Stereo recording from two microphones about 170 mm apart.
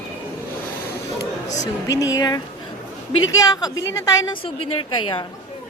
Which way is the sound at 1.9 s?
20° left (ahead or behind).